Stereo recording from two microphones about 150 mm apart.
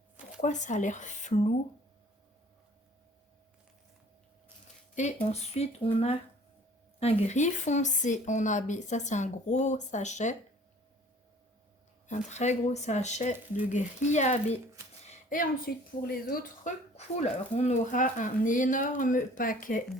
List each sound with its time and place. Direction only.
0.4 s speech: 55° left (ahead or behind)
5.2 s speech: 45° left (ahead or behind)
12.0 s speech: 50° left (ahead or behind)
15.3 s a woman's voice: 70° left (ahead or behind)
17.2 s speech: 50° left (ahead or behind)